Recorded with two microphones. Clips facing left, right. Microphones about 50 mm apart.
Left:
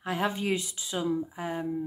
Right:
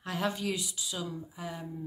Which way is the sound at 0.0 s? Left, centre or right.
Left.